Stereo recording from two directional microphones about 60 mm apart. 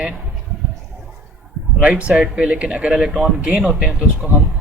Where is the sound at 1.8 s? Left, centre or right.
Right.